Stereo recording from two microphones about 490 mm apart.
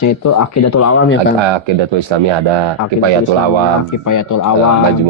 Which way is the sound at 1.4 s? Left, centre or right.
Right.